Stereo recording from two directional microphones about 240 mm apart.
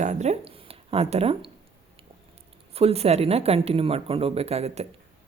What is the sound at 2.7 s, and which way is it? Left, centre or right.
Speech, right.